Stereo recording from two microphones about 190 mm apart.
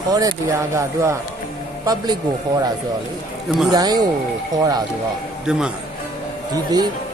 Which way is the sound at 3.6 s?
20° right (ahead or behind).